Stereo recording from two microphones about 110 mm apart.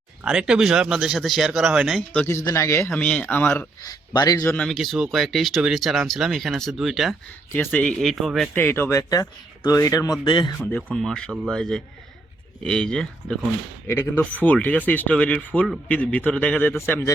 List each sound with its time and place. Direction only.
0.3 s speech: 5° right (ahead or behind)
2.2 s a man's voice: 25° left (ahead or behind)
4.1 s speech: 35° left (ahead or behind)
4.5 s speech: 5° left (ahead or behind)
7.5 s speech: 15° left (ahead or behind); by 8.4 s centre (ahead or behind)
8.5 s a man's voice: 20° left (ahead or behind)
10.2 s speech: 50° left (ahead or behind)
10.9 s speech: 5° left (ahead or behind)
13.8 s a man's voice: 20° left (ahead or behind)